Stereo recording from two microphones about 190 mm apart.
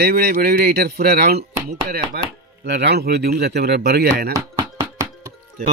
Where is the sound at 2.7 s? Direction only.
60° right (ahead or behind).